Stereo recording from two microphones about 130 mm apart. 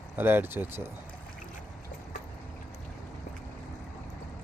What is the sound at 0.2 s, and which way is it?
Speech, 15° right (ahead or behind).